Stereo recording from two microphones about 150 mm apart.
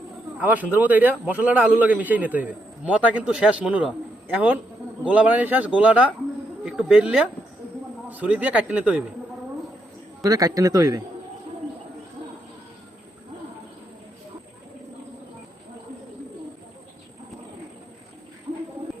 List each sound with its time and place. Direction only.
0.3 s a man's voice: 10° right (ahead or behind)
10.2 s speech: 25° right (ahead or behind)